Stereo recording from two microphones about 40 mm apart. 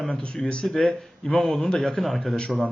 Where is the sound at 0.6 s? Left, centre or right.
Centre.